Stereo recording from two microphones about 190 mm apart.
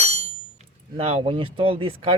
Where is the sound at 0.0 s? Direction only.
35° right (ahead or behind).